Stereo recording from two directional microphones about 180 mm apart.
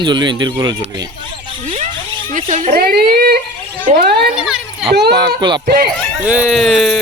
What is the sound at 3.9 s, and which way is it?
Speech, 65° right (ahead or behind).